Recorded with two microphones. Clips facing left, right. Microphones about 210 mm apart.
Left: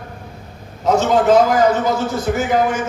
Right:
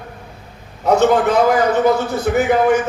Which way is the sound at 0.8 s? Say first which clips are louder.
Right 1 dB; 60° right (ahead or behind).